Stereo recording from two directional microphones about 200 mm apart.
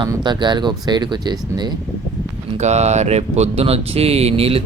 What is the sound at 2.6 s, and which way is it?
A man's voice, 35° right (ahead or behind).